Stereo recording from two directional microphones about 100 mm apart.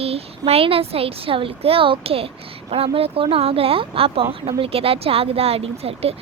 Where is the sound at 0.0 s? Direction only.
85° right.